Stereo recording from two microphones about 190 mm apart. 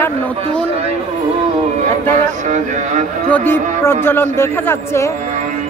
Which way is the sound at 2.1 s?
40° right (ahead or behind).